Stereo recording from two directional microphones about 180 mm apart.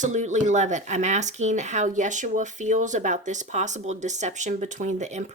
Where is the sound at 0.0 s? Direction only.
40° right (ahead or behind).